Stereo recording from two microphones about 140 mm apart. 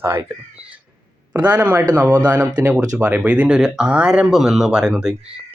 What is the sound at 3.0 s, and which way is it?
Speech, 10° right (ahead or behind).